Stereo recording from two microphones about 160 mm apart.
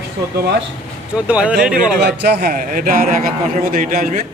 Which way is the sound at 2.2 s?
80° right.